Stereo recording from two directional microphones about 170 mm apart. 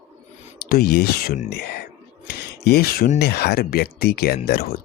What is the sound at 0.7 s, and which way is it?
Speech, 65° left (ahead or behind).